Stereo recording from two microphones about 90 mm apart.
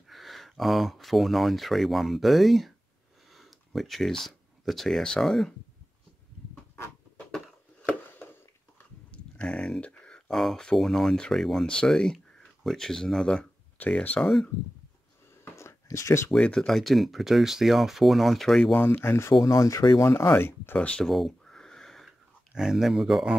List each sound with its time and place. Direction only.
0.1 s speech: centre (ahead or behind)
9.1 s speech: 10° left (ahead or behind)
14.2 s speech: 5° left (ahead or behind)
15.5 s a sound: 35° left (ahead or behind)
16.3 s speech: 10° left (ahead or behind)
19.0 s speech: 30° left (ahead or behind)
20.8 s speech: 10° left (ahead or behind)
21.1 s a sound: 5° left (ahead or behind)
22.5 s speech: 5° right (ahead or behind)